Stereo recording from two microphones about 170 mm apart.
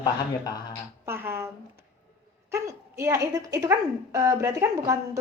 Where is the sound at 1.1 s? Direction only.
15° right (ahead or behind).